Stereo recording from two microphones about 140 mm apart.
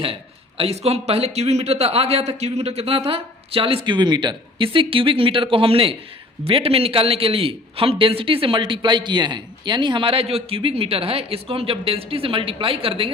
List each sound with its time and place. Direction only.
0.0 s a man's voice: 40° right (ahead or behind)